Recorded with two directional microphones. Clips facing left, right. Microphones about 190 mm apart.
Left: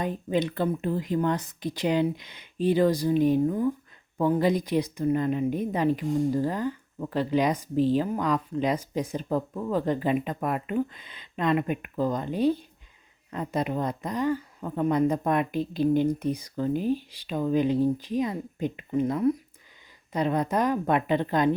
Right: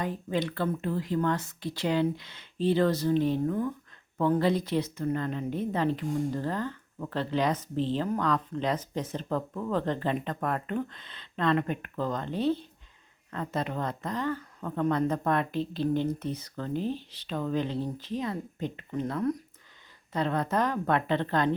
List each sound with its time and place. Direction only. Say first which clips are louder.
0.0 s a woman's voice: left 3 dB; 20° left (ahead or behind)